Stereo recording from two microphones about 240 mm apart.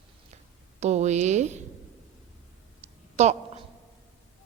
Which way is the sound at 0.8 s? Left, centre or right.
Right.